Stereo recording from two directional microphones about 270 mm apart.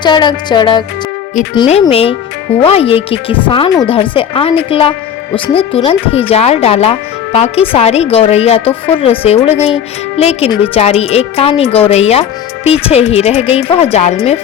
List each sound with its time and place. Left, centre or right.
0.0 s music: centre
1.5 s speech: centre